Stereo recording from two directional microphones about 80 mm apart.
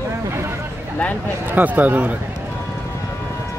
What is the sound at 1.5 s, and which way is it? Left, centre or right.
Speech, right.